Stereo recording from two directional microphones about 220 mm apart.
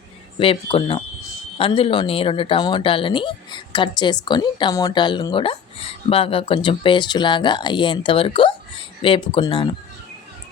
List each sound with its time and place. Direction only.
0.3 s speech: 25° left (ahead or behind)